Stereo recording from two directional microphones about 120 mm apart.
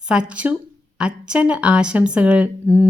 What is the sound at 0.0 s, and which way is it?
A woman's voice, 10° right (ahead or behind).